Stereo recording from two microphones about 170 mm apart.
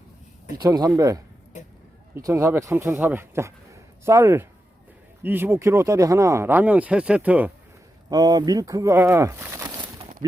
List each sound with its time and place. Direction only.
0.6 s speech: 20° right (ahead or behind)
8.1 s speech: 25° right (ahead or behind)